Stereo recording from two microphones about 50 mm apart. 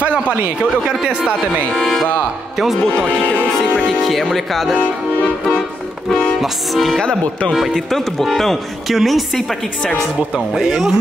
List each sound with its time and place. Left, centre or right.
0.8 s speech: centre
1.7 s music: centre
3.8 s a woman's voice: centre
6.4 s a woman's voice: centre
10.3 s speech: centre